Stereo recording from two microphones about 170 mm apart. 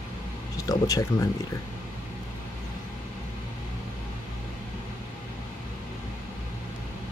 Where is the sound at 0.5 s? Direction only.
20° left (ahead or behind).